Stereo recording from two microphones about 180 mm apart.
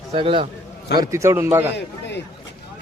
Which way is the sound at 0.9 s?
20° right (ahead or behind).